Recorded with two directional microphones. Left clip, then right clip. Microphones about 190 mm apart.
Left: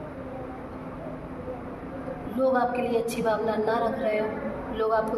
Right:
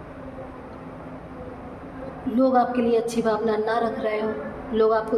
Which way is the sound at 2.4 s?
40° right (ahead or behind).